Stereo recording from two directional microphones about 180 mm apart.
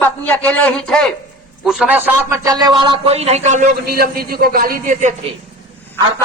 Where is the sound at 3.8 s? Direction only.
60° right (ahead or behind).